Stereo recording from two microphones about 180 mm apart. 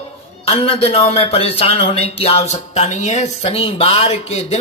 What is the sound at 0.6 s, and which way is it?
Speech, 30° left (ahead or behind).